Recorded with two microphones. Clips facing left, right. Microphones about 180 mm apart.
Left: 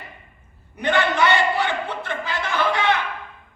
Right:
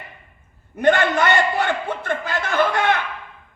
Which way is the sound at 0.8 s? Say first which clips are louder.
Right 3 dB; 50° right (ahead or behind).